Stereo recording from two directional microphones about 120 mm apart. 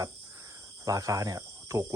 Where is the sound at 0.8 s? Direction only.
30° right (ahead or behind).